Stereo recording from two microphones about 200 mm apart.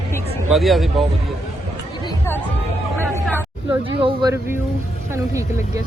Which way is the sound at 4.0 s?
25° right (ahead or behind).